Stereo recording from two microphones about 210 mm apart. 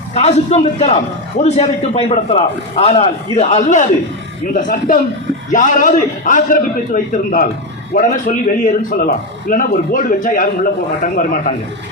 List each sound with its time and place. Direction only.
0.1 s a man's voice: 30° left (ahead or behind)